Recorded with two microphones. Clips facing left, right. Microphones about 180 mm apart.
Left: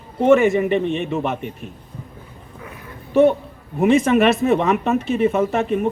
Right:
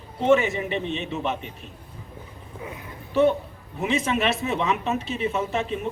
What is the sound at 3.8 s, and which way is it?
Speech, 50° left (ahead or behind).